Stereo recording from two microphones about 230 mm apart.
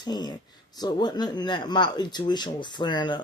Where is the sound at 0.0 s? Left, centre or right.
Centre.